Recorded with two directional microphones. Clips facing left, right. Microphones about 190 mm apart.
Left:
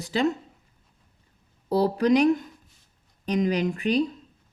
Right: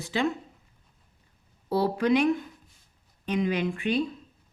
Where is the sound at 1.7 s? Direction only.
40° left (ahead or behind).